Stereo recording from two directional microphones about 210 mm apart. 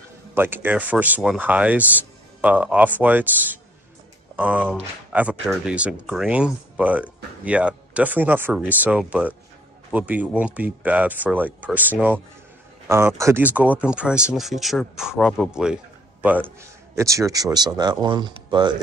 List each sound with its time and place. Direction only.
0.3 s a man's voice: 10° right (ahead or behind)